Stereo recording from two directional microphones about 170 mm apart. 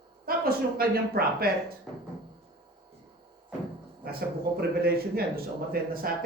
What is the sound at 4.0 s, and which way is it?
Speech, 65° right (ahead or behind).